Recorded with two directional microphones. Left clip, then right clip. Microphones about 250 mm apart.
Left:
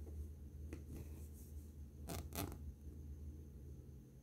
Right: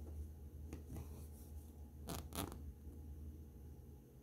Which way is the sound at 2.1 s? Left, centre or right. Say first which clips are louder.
Right 1 dB; centre.